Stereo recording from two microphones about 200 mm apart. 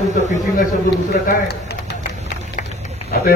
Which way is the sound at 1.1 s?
50° left (ahead or behind).